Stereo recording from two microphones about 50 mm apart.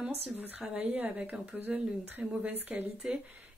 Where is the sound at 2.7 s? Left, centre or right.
Centre.